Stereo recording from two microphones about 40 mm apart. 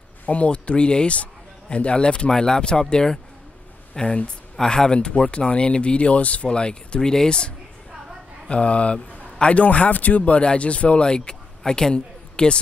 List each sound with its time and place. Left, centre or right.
0.3 s speech: left; by 3.2 s centre
4.0 s a man's voice: left
4.6 s a man's voice: centre; by 10.4 s left
10.4 s speech: left